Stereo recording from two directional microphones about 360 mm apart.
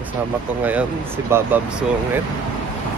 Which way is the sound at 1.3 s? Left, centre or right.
Centre.